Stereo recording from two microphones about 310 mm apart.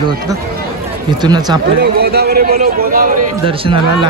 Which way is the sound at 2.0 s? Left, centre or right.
Right.